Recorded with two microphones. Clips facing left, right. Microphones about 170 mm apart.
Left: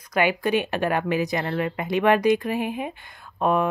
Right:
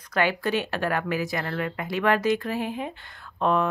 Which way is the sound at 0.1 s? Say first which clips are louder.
Left 3 dB; 15° left (ahead or behind).